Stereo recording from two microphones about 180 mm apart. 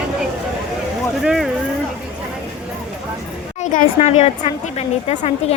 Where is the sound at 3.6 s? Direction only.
40° left (ahead or behind).